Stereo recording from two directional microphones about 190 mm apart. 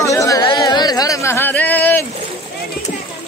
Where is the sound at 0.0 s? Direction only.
15° left (ahead or behind).